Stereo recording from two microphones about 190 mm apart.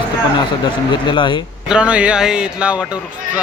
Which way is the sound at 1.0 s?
25° left (ahead or behind).